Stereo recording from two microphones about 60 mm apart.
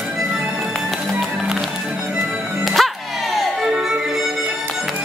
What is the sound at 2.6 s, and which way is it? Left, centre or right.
Music, centre.